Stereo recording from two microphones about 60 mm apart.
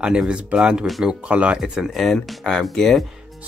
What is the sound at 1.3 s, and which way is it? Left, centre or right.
Speech, right.